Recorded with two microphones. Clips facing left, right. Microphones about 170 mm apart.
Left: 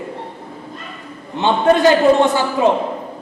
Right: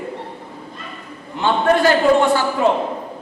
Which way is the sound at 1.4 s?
20° left (ahead or behind).